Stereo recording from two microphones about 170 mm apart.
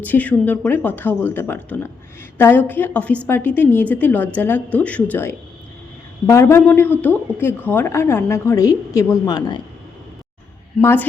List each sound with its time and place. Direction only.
0.0 s speech: 10° left (ahead or behind)
10.8 s speech: 15° left (ahead or behind)